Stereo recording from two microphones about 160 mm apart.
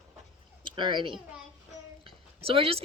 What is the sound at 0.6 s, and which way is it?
Speech, 30° right (ahead or behind).